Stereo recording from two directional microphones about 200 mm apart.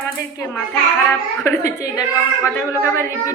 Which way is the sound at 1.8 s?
15° left (ahead or behind).